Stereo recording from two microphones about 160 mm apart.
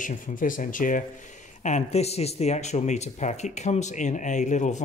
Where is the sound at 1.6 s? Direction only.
45° left (ahead or behind).